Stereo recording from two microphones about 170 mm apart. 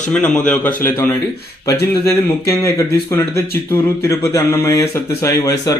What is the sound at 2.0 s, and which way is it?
Speech, 15° left (ahead or behind).